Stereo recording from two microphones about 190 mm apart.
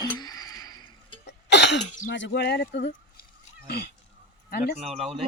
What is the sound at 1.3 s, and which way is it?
Cough, 65° left (ahead or behind).